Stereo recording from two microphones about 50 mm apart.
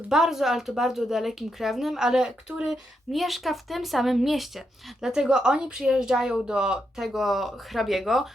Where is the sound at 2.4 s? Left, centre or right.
Right.